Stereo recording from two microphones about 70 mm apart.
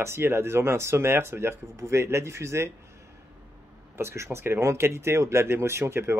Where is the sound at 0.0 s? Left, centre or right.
Right.